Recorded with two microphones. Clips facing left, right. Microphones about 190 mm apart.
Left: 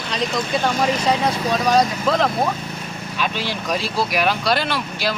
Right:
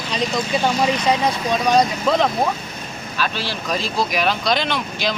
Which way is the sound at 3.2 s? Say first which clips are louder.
Even; 15° left (ahead or behind).